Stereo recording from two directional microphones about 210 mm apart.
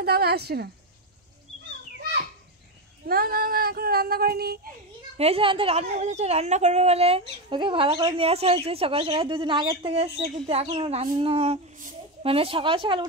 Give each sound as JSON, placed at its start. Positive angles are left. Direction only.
{"t": 0.0, "sound": "child singing", "side_deg": -50}
{"t": 3.1, "sound": "child singing", "side_deg": -45}
{"t": 5.1, "sound": "a woman's voice", "side_deg": -30}